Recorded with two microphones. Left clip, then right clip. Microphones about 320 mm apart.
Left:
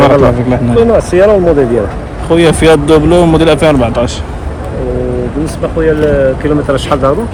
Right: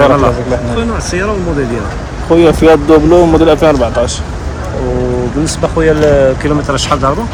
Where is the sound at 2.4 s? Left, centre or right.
Left.